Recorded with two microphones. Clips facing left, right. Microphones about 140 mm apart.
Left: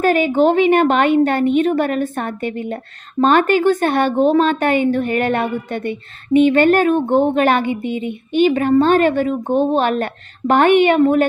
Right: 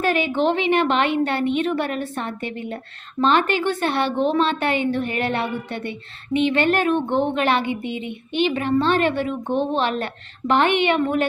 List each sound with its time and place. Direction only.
0.0 s a woman's voice: 45° left (ahead or behind)